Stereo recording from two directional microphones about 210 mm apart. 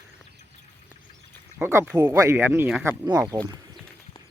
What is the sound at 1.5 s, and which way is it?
Speech, 10° right (ahead or behind).